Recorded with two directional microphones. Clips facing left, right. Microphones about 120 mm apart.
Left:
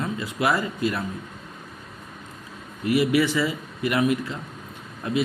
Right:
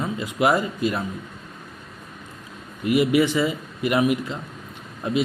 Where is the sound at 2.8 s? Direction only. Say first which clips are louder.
Right 2 dB; 20° right (ahead or behind).